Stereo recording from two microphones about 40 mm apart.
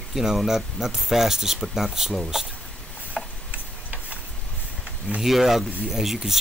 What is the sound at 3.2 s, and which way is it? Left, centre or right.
Tick-tock, centre.